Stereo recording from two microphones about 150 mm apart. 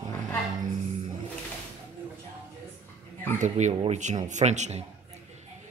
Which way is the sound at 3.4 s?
50° right (ahead or behind).